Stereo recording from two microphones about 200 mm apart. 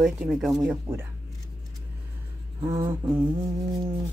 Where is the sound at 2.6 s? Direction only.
15° right (ahead or behind).